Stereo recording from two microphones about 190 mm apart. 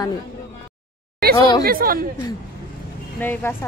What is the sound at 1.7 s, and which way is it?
Speech, 50° right (ahead or behind).